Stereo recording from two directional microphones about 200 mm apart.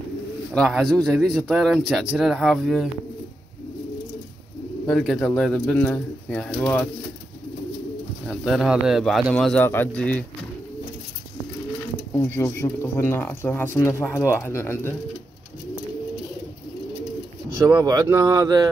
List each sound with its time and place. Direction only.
0.6 s a man's voice: centre (ahead or behind)
4.8 s a man's voice: centre (ahead or behind)
8.3 s a man's voice: centre (ahead or behind)
12.1 s speech: 10° left (ahead or behind)
17.6 s speech: 15° right (ahead or behind)